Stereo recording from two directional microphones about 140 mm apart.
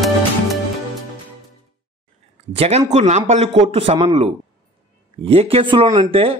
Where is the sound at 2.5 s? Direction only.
45° right (ahead or behind).